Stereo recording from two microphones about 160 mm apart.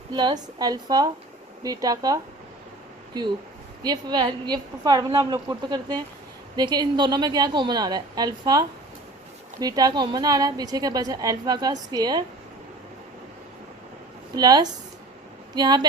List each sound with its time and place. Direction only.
0.1 s a woman's voice: 25° right (ahead or behind)
3.8 s a woman's voice: 25° right (ahead or behind)
14.3 s a woman's voice: 25° right (ahead or behind)